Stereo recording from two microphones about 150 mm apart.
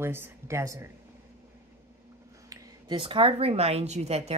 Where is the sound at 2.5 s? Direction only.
30° right (ahead or behind).